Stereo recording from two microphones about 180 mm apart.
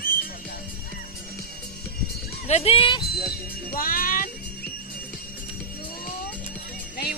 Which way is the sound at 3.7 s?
50° left (ahead or behind).